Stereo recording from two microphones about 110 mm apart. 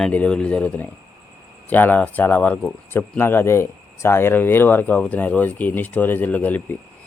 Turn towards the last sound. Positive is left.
turn(degrees=15)  # may be behind; listen again after turning